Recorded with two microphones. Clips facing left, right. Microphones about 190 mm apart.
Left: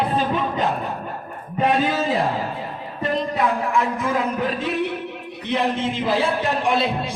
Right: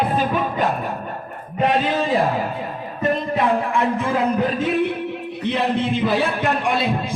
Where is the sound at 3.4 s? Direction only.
30° right (ahead or behind).